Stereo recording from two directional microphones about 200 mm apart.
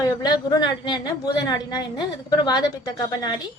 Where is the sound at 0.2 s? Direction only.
20° left (ahead or behind).